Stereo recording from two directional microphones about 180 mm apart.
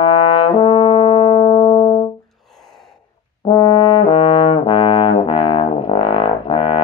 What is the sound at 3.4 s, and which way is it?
Brass instrument, 25° left (ahead or behind).